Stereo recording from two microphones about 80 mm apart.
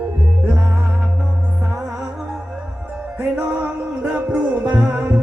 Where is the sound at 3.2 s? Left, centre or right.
Right.